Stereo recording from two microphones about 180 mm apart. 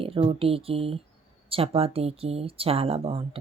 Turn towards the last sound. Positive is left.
turn(degrees=-30)  # may be behind; listen again after turning